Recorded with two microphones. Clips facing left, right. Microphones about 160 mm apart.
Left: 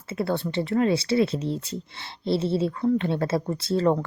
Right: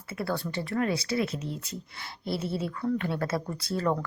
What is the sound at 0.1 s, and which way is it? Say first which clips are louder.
Speech: left 5 dB; 25° left (ahead or behind).